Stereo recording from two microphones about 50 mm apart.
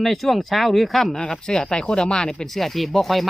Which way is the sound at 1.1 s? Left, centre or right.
Centre.